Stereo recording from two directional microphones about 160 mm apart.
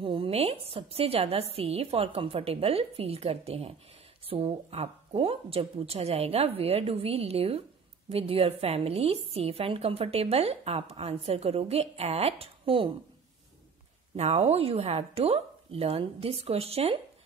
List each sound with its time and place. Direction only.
0.0 s a woman's voice: 35° right (ahead or behind)
14.1 s a woman's voice: 45° right (ahead or behind)